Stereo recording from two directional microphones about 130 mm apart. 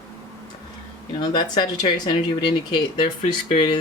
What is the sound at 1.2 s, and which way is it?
Speech, 35° left (ahead or behind).